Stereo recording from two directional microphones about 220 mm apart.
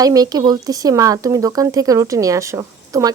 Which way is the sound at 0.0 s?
15° right (ahead or behind).